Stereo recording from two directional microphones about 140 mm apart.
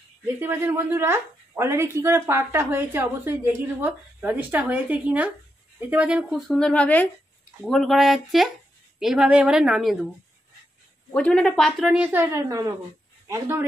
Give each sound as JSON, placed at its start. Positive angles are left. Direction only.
{"t": 0.4, "sound": "a woman's voice", "side_deg": -15}
{"t": 11.1, "sound": "speech", "side_deg": 5}
{"t": 12.3, "sound": "a woman's voice", "side_deg": -25}